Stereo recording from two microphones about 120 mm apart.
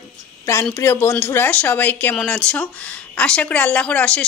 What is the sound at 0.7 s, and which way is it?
A woman's voice, 20° left (ahead or behind).